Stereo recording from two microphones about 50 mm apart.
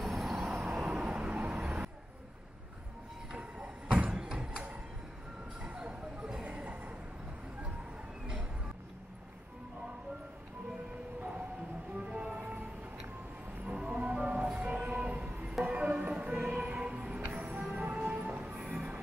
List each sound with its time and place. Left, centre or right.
0.0 s vehicle: centre
0.8 s vehicle: centre
3.3 s a sound: right
5.6 s a sound: right
11.1 s music: right
13.7 s music: right
18.7 s music: centre